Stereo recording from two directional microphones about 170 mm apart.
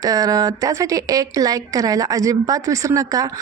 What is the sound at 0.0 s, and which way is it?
Speech, 20° right (ahead or behind).